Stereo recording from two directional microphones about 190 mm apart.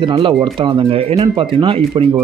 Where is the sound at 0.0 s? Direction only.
25° right (ahead or behind).